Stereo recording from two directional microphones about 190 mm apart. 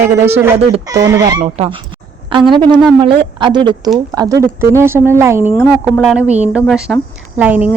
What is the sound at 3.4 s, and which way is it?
A child's voice, 25° right (ahead or behind).